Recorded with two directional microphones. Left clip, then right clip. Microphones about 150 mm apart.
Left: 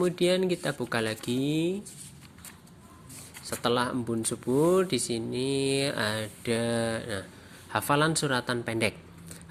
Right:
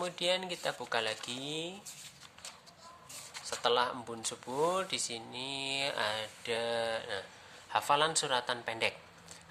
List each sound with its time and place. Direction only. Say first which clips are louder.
0.0 s speech: left 7 dB; 25° left (ahead or behind)
3.4 s speech: left 3 dB; 25° left (ahead or behind)